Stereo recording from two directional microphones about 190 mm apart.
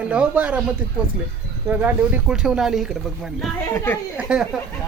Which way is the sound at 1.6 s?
10° right (ahead or behind).